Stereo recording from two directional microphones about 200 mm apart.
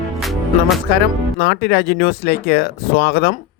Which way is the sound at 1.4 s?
55° left (ahead or behind).